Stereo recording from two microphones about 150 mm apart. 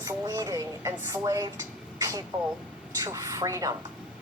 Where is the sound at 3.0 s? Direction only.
20° right (ahead or behind).